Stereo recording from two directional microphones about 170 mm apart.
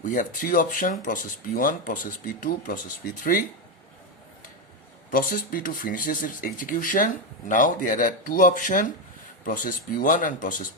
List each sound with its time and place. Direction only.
0.0 s speech: 50° left (ahead or behind)
5.1 s speech: 55° left (ahead or behind)